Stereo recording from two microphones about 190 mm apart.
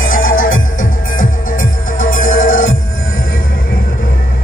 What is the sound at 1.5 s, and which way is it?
Music, 90° left.